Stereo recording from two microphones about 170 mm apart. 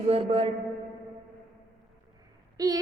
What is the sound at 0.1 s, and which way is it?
Mantra, 35° right (ahead or behind).